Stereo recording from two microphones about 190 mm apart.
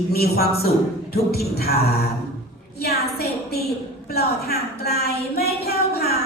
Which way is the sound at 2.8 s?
55° left (ahead or behind).